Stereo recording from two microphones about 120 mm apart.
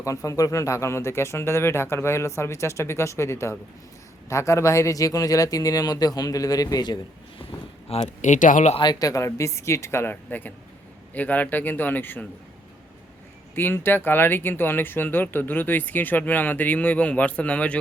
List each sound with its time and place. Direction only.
0.0 s speech: 25° left (ahead or behind)
8.0 s speech: 90° left
8.8 s speech: 35° left (ahead or behind); by 12.2 s 15° left (ahead or behind)
13.6 s speech: 15° left (ahead or behind)